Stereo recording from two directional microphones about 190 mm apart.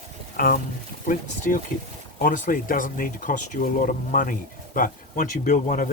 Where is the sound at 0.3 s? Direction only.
50° left (ahead or behind).